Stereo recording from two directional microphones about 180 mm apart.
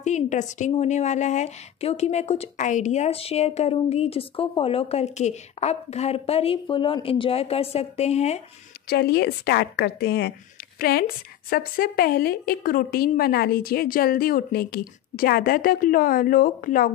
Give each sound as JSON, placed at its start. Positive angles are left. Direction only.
{"t": 0.0, "sound": "a woman's voice", "side_deg": 40}
{"t": 8.8, "sound": "a woman's voice", "side_deg": 60}